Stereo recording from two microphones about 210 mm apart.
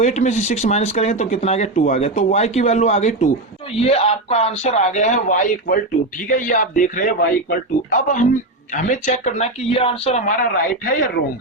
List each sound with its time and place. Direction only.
0.0 s speech: 35° left (ahead or behind)